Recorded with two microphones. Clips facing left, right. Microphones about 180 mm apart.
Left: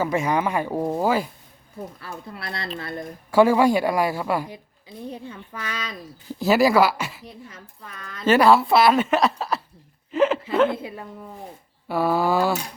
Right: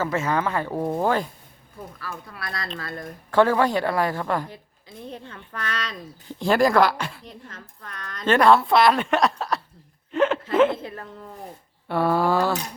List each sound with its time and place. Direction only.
0.0 s a woman's voice: 15° left (ahead or behind)
2.0 s speech: 25° left (ahead or behind)
3.3 s a woman's voice: 10° left (ahead or behind)
10.8 s a woman's voice: 10° left (ahead or behind)